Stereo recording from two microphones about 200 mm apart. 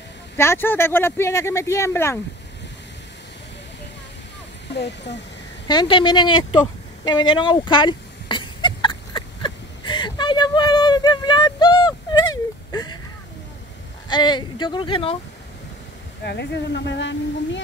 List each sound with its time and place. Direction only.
0.4 s speech: 10° left (ahead or behind)
4.7 s speech: 60° left (ahead or behind)
5.7 s speech: 25° left (ahead or behind)
7.1 s a sound: 20° left (ahead or behind)
14.0 s speech: 25° left (ahead or behind)
16.3 s speech: 60° left (ahead or behind)